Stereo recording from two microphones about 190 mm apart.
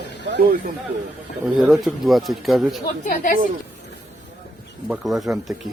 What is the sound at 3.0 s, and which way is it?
Speech, 45° left (ahead or behind).